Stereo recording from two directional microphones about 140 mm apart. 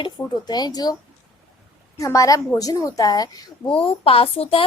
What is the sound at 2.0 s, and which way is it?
A woman's voice, 25° left (ahead or behind).